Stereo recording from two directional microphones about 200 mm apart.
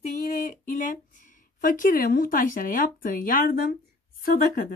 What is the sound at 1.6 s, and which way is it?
Speech, 45° left (ahead or behind).